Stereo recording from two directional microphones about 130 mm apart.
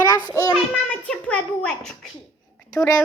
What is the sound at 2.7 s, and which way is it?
Speech, 25° left (ahead or behind).